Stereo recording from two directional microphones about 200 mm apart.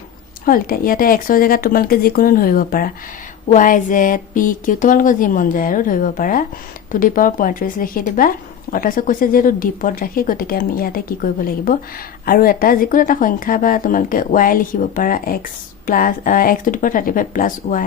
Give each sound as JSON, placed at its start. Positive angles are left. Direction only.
{"t": 0.4, "sound": "a woman's voice", "side_deg": 45}